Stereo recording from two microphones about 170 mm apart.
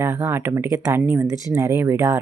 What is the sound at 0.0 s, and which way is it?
Speech, 15° right (ahead or behind).